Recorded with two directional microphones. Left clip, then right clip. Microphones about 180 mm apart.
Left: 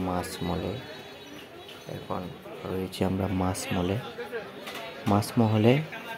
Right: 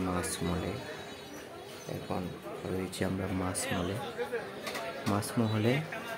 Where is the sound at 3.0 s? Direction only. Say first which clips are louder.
Left 8 dB; 20° left (ahead or behind).